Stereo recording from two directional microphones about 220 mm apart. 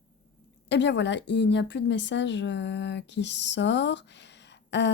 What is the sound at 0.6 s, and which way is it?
Speech, 55° left (ahead or behind).